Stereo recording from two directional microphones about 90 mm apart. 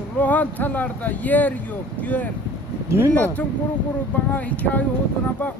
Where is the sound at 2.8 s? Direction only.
30° right (ahead or behind).